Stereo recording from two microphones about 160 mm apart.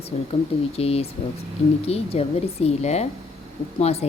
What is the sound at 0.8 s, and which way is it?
Speech, 40° left (ahead or behind).